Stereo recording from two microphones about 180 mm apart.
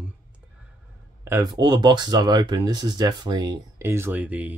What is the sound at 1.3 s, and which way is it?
Speech, 20° right (ahead or behind).